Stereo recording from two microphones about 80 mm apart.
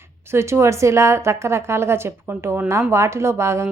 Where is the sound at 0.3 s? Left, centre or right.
Right.